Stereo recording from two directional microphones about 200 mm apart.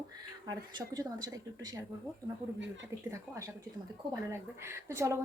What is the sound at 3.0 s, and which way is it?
Speech, 15° right (ahead or behind).